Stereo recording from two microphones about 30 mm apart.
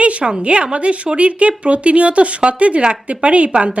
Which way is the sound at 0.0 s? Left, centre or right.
Right.